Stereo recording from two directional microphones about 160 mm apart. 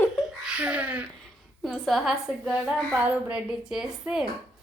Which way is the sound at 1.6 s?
Centre (ahead or behind).